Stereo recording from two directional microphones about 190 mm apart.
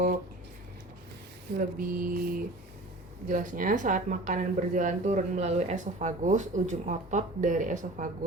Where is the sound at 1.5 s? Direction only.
50° right (ahead or behind).